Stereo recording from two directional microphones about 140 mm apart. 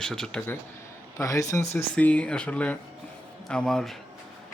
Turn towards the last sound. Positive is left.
turn(degrees=5)  # may be behind; listen again after turning